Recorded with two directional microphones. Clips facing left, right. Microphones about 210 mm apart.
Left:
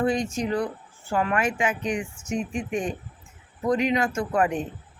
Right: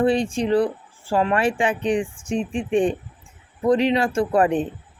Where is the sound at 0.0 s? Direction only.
30° right (ahead or behind).